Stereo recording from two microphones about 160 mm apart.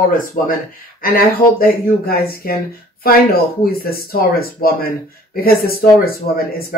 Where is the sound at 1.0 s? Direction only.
60° left (ahead or behind).